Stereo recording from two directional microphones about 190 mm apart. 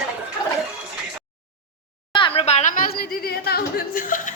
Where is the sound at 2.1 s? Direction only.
25° left (ahead or behind).